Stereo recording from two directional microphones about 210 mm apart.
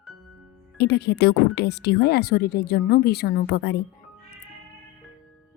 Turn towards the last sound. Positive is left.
turn(degrees=55)  # may be behind; listen again after turning